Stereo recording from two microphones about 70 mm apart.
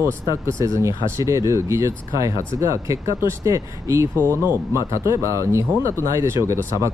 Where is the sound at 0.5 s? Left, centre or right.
Right.